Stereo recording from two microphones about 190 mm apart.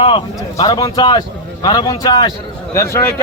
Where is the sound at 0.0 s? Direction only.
25° left (ahead or behind).